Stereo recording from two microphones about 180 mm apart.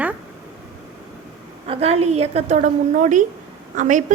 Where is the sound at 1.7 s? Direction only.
35° right (ahead or behind).